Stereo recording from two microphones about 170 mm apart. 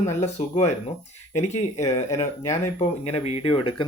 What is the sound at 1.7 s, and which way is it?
Speech, 20° left (ahead or behind).